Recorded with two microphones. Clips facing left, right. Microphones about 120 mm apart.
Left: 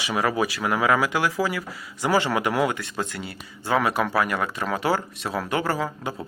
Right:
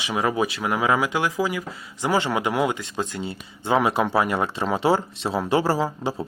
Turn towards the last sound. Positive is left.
turn(degrees=-30)  # may be behind; listen again after turning